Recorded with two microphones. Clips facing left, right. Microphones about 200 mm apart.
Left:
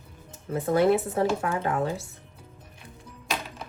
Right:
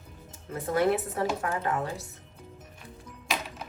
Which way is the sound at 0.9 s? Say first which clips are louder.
Left 4 dB; 30° left (ahead or behind).